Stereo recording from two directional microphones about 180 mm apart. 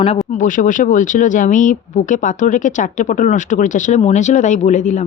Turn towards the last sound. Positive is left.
turn(degrees=40)  # may be behind; listen again after turning